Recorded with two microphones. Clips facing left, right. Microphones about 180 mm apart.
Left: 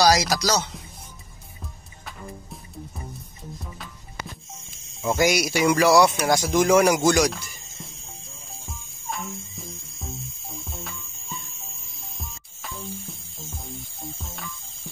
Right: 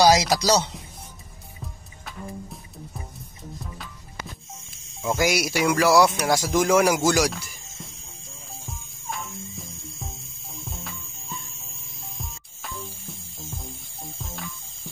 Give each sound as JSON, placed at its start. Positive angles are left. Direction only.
{"t": 0.0, "sound": "speech", "side_deg": -25}
{"t": 5.0, "sound": "speech", "side_deg": 0}
{"t": 8.6, "sound": "music", "side_deg": 0}
{"t": 10.6, "sound": "cricket", "side_deg": 0}
{"t": 12.2, "sound": "music", "side_deg": 0}
{"t": 14.1, "sound": "music", "side_deg": 0}